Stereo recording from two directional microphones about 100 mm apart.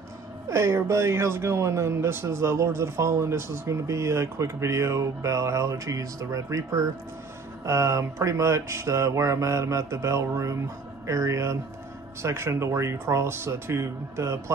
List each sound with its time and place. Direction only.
0.5 s speech: 30° right (ahead or behind)